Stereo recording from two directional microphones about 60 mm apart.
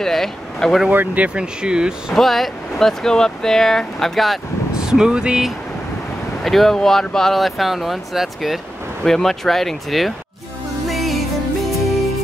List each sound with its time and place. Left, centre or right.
0.0 s speech: centre
0.8 s speech: right
2.1 s speech: centre
4.7 s speech: centre
6.4 s speech: centre
10.9 s music: centre